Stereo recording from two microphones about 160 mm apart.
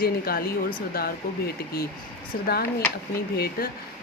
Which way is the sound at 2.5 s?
75° left (ahead or behind).